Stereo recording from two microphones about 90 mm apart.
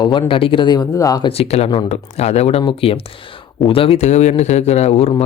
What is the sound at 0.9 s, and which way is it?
Speech, 40° left (ahead or behind).